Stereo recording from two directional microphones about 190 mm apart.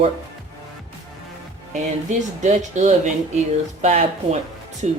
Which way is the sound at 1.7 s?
40° right (ahead or behind).